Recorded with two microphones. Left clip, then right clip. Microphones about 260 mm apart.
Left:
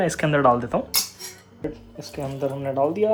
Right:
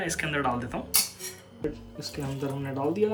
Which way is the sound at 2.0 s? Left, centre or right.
Centre.